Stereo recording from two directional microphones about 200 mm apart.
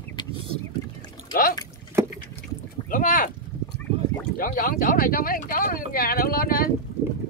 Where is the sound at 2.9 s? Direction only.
45° left (ahead or behind).